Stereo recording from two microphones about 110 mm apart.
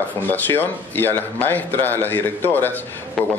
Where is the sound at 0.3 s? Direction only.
20° left (ahead or behind).